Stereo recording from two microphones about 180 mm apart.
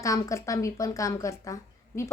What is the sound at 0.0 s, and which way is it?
A woman's voice, 20° left (ahead or behind).